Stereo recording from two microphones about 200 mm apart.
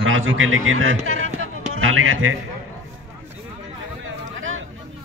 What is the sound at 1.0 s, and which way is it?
Speech, 90° right.